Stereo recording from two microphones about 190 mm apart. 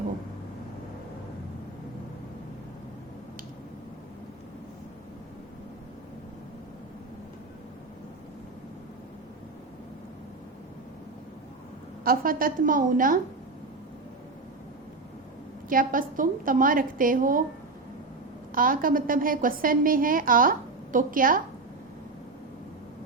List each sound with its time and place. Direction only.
12.0 s a woman's voice: 50° right (ahead or behind)
15.7 s a woman's voice: 45° right (ahead or behind)
18.5 s a woman's voice: 45° right (ahead or behind)